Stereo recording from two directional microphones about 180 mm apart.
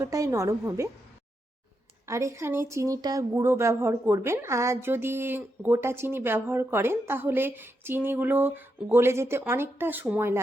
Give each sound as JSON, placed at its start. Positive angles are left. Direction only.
{"t": 0.0, "sound": "speech", "side_deg": -15}
{"t": 2.0, "sound": "speech", "side_deg": -15}